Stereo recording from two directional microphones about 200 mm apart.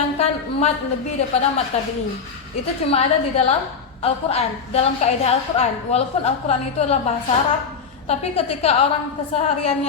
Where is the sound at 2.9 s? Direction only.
30° left (ahead or behind).